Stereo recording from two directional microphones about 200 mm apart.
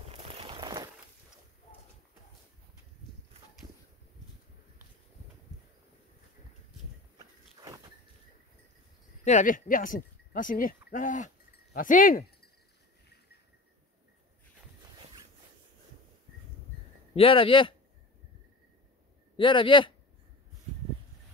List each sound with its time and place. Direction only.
0.1 s a sound: 30° right (ahead or behind)
7.2 s walk: 20° right (ahead or behind)
9.2 s speech: 40° left (ahead or behind)
14.8 s zipper: 20° right (ahead or behind)
17.1 s a man's voice: 25° left (ahead or behind)
19.3 s a man's voice: 25° left (ahead or behind)